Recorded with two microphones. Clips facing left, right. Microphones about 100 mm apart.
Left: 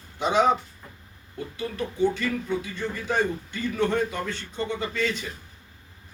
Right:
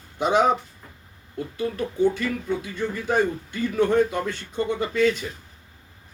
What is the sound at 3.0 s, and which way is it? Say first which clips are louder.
Speech: right 3 dB; 45° right (ahead or behind).